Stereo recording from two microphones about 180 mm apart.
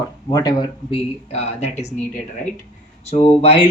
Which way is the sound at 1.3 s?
35° left (ahead or behind).